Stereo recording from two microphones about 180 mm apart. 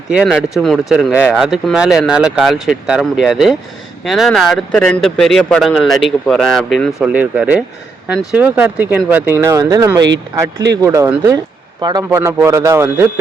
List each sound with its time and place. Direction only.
0.1 s a man's voice: 5° right (ahead or behind)